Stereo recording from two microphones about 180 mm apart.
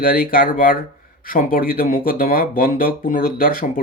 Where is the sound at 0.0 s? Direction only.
50° left (ahead or behind).